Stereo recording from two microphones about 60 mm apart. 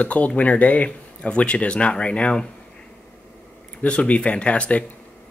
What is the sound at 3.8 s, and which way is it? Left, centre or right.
Speech, left.